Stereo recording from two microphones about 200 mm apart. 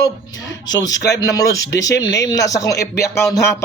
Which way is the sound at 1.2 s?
15° left (ahead or behind).